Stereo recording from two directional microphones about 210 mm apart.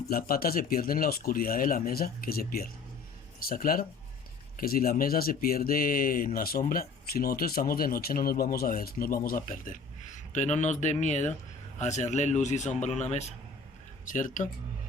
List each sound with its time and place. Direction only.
0.1 s speech: 45° left (ahead or behind)